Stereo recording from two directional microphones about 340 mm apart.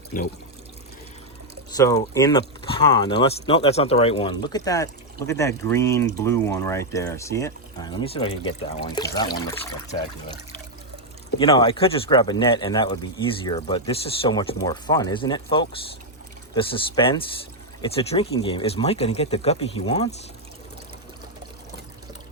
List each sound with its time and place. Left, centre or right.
1.7 s speech: centre
11.3 s speech: centre